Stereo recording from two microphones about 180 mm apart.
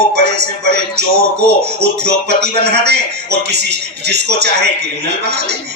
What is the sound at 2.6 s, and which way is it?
Speech, 65° right (ahead or behind).